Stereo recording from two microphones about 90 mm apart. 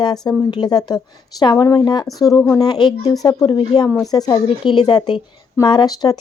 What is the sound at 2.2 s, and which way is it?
Speech, 40° left (ahead or behind).